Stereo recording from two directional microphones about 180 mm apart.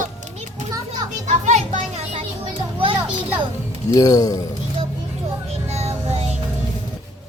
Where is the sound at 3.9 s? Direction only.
20° left (ahead or behind).